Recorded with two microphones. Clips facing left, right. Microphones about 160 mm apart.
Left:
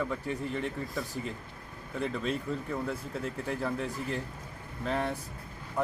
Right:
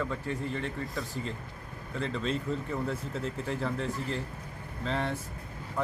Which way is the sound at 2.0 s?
10° left (ahead or behind).